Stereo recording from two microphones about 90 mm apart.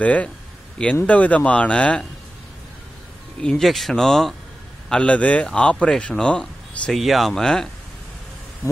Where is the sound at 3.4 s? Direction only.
5° left (ahead or behind).